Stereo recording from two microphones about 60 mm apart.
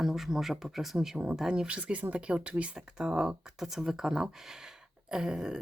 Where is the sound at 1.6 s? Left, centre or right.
Right.